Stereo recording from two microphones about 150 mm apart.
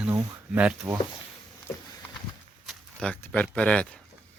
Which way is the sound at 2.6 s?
5° left (ahead or behind).